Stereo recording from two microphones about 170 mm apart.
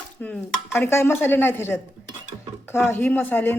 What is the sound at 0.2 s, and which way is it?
A woman's voice, 5° left (ahead or behind).